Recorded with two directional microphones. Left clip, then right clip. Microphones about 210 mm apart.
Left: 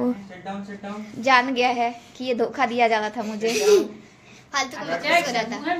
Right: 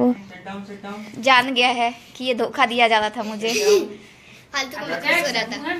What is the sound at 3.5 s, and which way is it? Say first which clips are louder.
A man's voice: even; 50° left (ahead or behind).